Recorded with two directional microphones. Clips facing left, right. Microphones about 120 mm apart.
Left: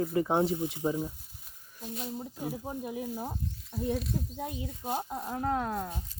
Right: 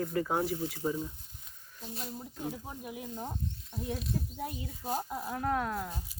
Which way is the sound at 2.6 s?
30° left (ahead or behind).